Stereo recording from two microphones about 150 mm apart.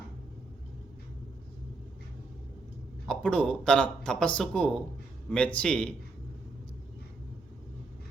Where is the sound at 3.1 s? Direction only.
5° left (ahead or behind).